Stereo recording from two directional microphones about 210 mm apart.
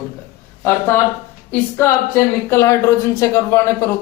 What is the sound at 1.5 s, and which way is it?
A woman's voice, 10° left (ahead or behind).